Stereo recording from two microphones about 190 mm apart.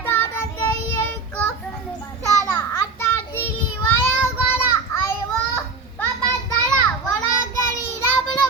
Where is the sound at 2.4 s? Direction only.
10° left (ahead or behind).